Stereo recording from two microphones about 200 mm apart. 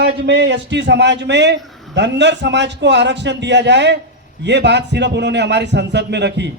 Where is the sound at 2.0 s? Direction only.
60° right (ahead or behind).